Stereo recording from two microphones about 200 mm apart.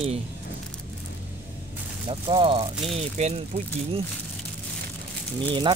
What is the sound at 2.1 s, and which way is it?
Speech, 25° right (ahead or behind).